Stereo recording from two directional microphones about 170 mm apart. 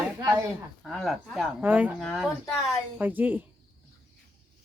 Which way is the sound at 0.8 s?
Centre (ahead or behind).